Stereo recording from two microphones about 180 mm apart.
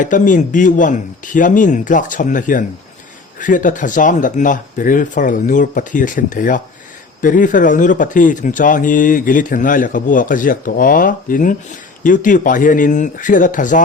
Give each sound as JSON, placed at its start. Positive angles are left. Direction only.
{"t": 0.0, "sound": "speech", "side_deg": 45}